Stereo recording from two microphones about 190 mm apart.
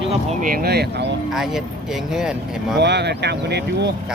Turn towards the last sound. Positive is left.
turn(degrees=-60)  # may be behind; listen again after turning